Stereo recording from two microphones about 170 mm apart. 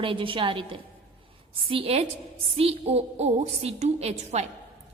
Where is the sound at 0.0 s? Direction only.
30° right (ahead or behind).